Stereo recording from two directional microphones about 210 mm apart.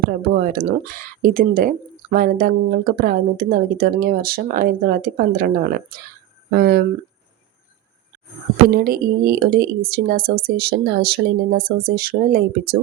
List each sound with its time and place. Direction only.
0.2 s speech: 45° right (ahead or behind)
8.7 s speech: 45° right (ahead or behind)